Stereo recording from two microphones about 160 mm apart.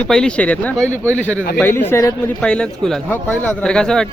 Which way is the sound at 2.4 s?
5° left (ahead or behind).